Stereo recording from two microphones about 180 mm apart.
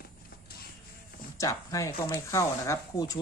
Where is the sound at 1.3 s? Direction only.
15° left (ahead or behind).